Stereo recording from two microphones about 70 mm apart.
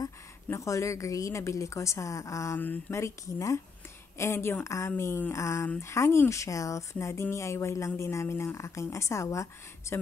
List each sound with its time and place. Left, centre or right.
0.5 s speech: left
2.5 s speech: left
2.9 s speech: left